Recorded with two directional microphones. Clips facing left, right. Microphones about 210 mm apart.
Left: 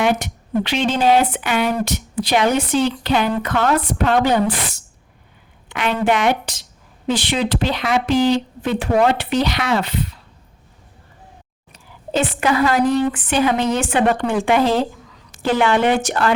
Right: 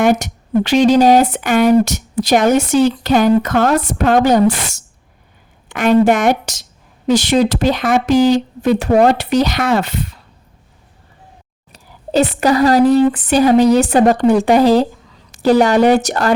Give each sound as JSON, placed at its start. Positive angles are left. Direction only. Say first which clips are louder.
{"t": 0.0, "sound": "speech", "louder": "right 5 dB", "side_deg": -45}
{"t": 11.7, "sound": "speech", "louder": "right 5 dB", "side_deg": -40}